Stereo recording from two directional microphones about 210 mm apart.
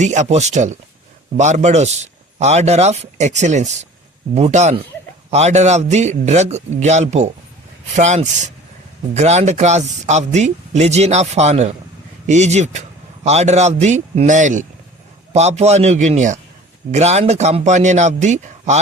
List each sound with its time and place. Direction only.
0.0 s speech: 35° right (ahead or behind)